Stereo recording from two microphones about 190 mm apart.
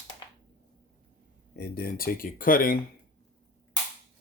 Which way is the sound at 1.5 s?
55° left (ahead or behind).